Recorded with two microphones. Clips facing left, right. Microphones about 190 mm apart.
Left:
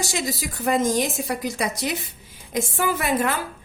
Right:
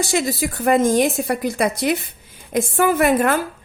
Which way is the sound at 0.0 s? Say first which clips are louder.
Right 7 dB; 55° right (ahead or behind).